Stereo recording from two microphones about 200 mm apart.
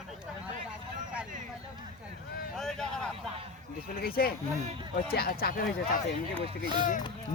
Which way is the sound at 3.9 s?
45° left (ahead or behind).